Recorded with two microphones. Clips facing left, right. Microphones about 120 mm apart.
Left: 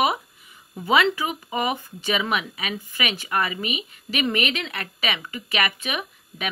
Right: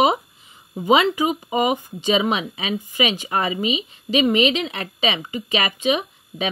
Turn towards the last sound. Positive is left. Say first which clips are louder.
# right 6 dB
turn(degrees=-20)  # may be behind; listen again after turning